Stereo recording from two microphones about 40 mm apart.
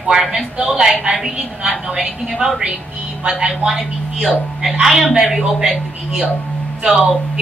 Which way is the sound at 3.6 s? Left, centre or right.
Centre.